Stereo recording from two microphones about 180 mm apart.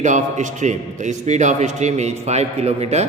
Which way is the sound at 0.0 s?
40° right (ahead or behind).